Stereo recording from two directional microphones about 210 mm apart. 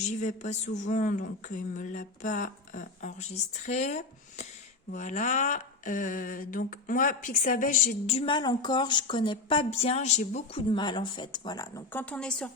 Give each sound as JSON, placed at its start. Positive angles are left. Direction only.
{"t": 0.1, "sound": "speech", "side_deg": 35}